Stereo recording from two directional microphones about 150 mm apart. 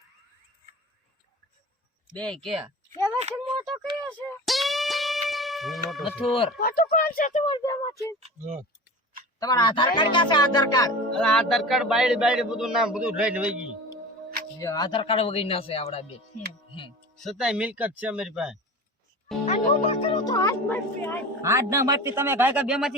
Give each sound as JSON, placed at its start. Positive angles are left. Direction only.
{"t": 2.1, "sound": "a man's voice", "side_deg": 5}
{"t": 3.2, "sound": "speech", "side_deg": -45}
{"t": 3.6, "sound": "speech", "side_deg": 0}
{"t": 3.8, "sound": "a sound", "side_deg": -30}
{"t": 4.4, "sound": "music", "side_deg": 0}
{"t": 6.6, "sound": "speech", "side_deg": 80}
{"t": 7.4, "sound": "speech", "side_deg": 25}
{"t": 9.4, "sound": "speech", "side_deg": 25}
{"t": 11.2, "sound": "a man's voice", "side_deg": 5}
{"t": 14.6, "sound": "speech", "side_deg": 25}
{"t": 17.2, "sound": "a man's voice", "side_deg": 0}
{"t": 19.5, "sound": "speech", "side_deg": 45}
{"t": 20.2, "sound": "a woman's voice", "side_deg": 25}
{"t": 21.4, "sound": "a man's voice", "side_deg": -20}